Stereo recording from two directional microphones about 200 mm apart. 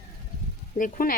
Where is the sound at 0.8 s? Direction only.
45° left (ahead or behind).